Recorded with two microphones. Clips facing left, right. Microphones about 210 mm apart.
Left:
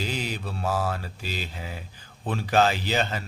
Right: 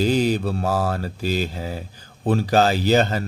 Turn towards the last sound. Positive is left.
turn(degrees=-40)  # may be behind; listen again after turning